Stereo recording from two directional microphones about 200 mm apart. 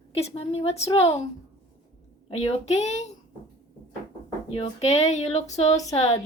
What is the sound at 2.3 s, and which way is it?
Speech, 35° left (ahead or behind).